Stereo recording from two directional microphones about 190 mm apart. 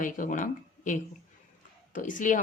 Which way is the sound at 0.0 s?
45° left (ahead or behind).